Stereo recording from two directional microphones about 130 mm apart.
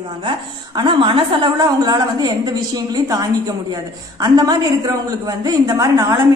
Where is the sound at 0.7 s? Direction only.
35° right (ahead or behind).